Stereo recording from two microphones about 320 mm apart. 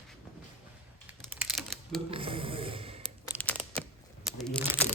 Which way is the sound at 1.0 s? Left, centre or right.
Centre.